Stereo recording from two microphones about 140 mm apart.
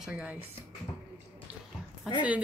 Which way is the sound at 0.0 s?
10° right (ahead or behind).